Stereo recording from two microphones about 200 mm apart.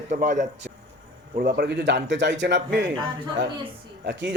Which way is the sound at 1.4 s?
50° right (ahead or behind).